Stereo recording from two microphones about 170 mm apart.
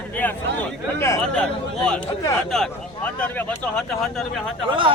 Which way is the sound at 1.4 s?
5° left (ahead or behind).